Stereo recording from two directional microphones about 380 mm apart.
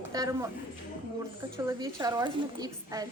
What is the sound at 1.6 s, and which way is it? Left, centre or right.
A woman's voice, centre.